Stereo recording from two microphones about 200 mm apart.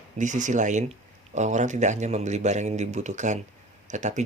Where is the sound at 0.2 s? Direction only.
40° right (ahead or behind).